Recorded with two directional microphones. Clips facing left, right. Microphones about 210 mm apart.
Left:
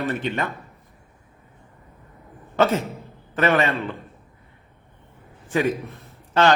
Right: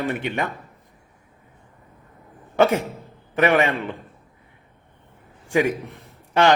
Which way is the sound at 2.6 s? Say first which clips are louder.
Right 2 dB; 15° right (ahead or behind).